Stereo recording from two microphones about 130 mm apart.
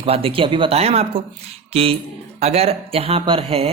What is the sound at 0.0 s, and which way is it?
A man's voice, 45° right (ahead or behind).